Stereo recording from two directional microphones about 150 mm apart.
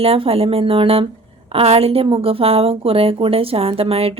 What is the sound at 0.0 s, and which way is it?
A woman's voice, 40° right (ahead or behind).